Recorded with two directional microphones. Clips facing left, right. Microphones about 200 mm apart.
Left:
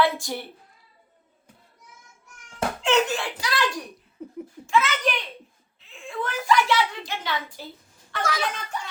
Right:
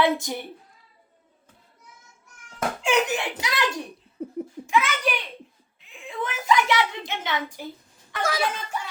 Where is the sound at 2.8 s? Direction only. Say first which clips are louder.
Left 1 dB; 15° right (ahead or behind).